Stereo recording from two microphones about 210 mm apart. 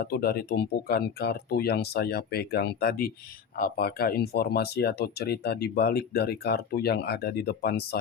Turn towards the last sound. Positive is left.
turn(degrees=50)  # may be behind; listen again after turning